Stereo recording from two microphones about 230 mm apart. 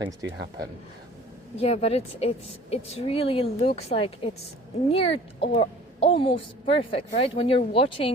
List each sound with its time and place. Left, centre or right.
0.0 s speech: centre
1.5 s a woman's voice: left